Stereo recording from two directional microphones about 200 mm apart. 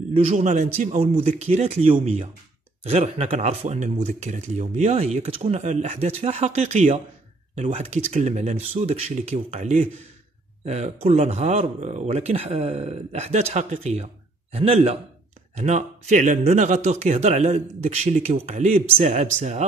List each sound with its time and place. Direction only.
0.1 s a man's voice: 30° right (ahead or behind)